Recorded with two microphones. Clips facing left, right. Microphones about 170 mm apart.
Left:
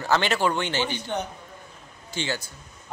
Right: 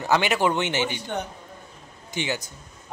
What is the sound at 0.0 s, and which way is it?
Speech, 15° right (ahead or behind).